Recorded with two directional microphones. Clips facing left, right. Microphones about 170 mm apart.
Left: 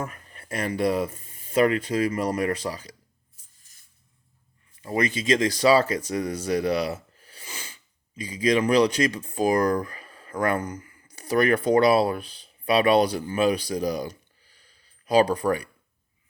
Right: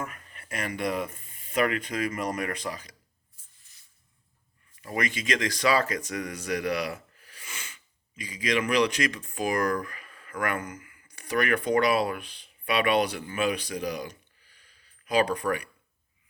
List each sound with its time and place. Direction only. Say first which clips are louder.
0.0 s speech: left 4 dB; 30° left (ahead or behind)
3.7 s a sound: left 1 dB; 40° left (ahead or behind)
4.8 s speech: left 5 dB; 30° left (ahead or behind)